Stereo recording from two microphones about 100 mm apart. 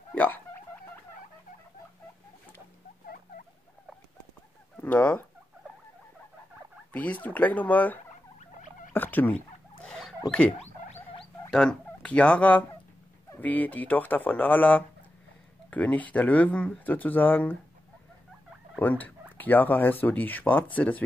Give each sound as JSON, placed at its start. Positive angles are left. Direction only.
{"t": 0.1, "sound": "hiccup", "side_deg": 15}
{"t": 4.7, "sound": "chicken", "side_deg": 15}
{"t": 6.9, "sound": "speech", "side_deg": 15}
{"t": 8.9, "sound": "fowl", "side_deg": 20}
{"t": 9.8, "sound": "rodents", "side_deg": 5}
{"t": 11.5, "sound": "fowl", "side_deg": 10}
{"t": 13.4, "sound": "speech", "side_deg": 15}
{"t": 18.8, "sound": "speech", "side_deg": 15}